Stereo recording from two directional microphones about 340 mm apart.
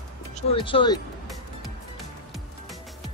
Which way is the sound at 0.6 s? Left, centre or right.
Centre.